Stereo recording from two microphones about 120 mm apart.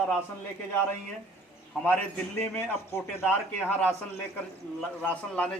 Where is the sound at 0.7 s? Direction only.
10° left (ahead or behind).